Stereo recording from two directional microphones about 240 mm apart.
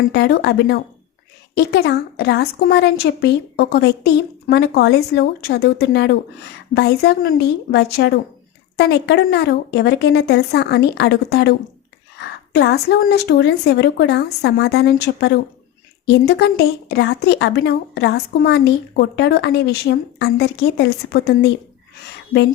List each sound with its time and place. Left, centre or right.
0.1 s a woman's voice: left